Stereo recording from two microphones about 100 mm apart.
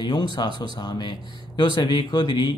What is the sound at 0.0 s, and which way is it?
Speech, 50° left (ahead or behind).